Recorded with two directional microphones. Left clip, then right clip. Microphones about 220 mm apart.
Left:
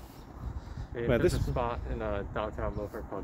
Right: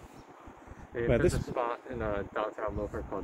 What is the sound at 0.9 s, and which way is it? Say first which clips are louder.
Speech: even; 30° right (ahead or behind).